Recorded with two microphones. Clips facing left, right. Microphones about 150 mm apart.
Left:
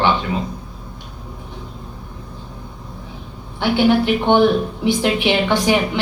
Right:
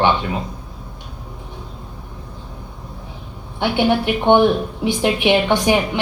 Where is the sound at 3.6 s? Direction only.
15° right (ahead or behind).